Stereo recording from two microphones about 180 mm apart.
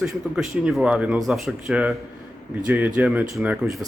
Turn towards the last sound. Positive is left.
turn(degrees=-15)  # may be behind; listen again after turning